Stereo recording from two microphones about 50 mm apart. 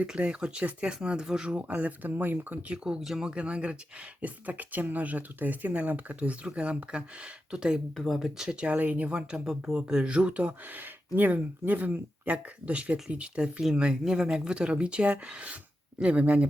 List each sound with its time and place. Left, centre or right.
0.2 s speech: centre; by 2.7 s right
2.7 s speech: centre
7.9 s speech: centre
8.4 s speech: centre
8.7 s speech: right
9.0 s speech: centre